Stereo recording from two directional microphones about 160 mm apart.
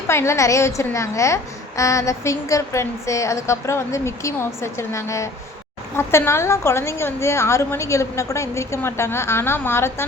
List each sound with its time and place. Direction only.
0.1 s a woman's voice: 15° left (ahead or behind)